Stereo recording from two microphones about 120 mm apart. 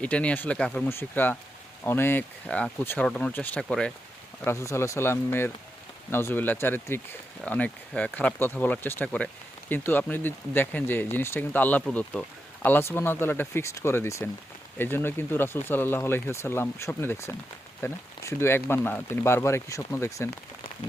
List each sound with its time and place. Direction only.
0.0 s speech: 10° left (ahead or behind)
4.4 s speech: 25° left (ahead or behind)